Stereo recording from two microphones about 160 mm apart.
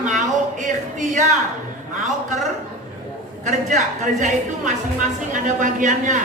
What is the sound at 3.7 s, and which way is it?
A man's voice, 50° right (ahead or behind).